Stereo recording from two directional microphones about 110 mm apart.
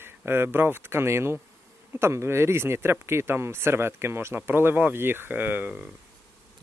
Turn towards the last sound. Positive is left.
turn(degrees=-15)  # may be behind; listen again after turning